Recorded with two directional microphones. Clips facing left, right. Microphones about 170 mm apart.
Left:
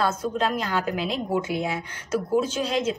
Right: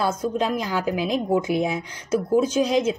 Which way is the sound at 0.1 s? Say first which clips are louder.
Right 2 dB; 15° right (ahead or behind).